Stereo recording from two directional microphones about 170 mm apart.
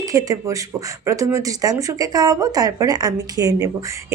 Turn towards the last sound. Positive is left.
turn(degrees=-20)  # may be behind; listen again after turning